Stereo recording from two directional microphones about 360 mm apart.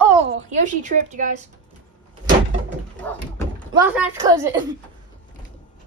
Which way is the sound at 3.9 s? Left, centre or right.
Centre.